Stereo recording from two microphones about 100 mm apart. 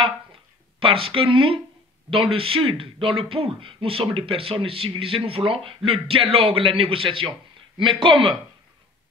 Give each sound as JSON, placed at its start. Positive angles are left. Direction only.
{"t": 0.7, "sound": "a man's voice", "side_deg": -65}